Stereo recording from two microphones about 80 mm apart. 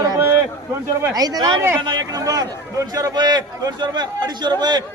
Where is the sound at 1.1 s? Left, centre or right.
Right.